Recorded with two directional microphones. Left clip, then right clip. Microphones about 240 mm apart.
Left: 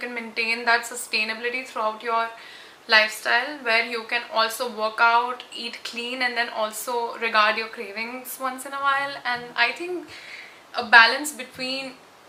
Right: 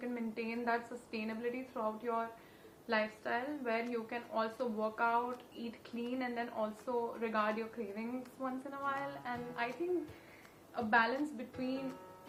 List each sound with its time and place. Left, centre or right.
0.0 s a woman's voice: centre
10.8 s a woman's voice: centre